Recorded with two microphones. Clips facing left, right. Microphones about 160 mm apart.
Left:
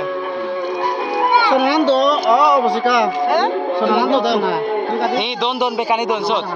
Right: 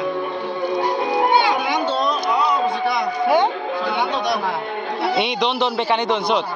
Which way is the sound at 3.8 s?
70° left (ahead or behind).